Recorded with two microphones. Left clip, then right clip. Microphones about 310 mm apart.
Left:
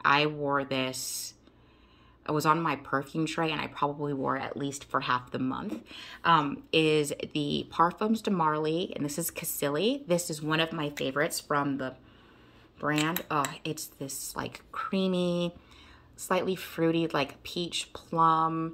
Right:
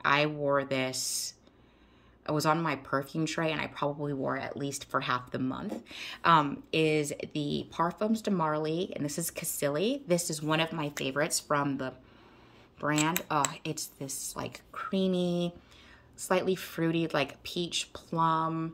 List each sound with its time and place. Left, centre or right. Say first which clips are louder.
0.0 s speech: left 2 dB; centre